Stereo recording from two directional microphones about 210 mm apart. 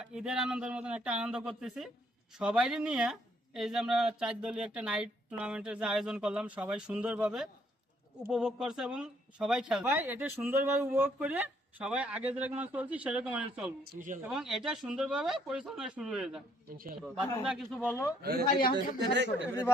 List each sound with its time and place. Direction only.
0.0 s speech: 5° right (ahead or behind)
13.8 s speech: 40° right (ahead or behind)
14.2 s speech: 5° right (ahead or behind)
17.8 s a man's voice: 10° left (ahead or behind)
19.1 s speech: 55° right (ahead or behind)